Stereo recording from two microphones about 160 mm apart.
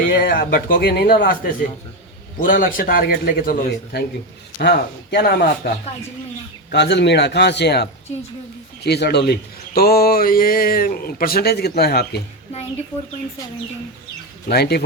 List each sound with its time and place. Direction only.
0.0 s a man's voice: 70° left (ahead or behind)
5.1 s a man's voice: 80° left
6.7 s a man's voice: 90° left
14.4 s speech: 85° left